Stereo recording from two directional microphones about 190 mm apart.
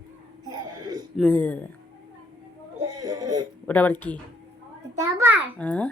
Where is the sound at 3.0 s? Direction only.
20° right (ahead or behind).